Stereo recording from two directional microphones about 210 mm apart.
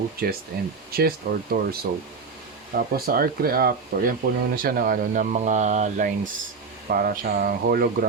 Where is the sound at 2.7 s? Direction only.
45° right (ahead or behind).